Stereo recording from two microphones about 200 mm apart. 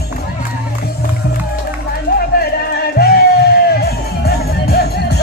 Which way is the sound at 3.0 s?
50° left (ahead or behind).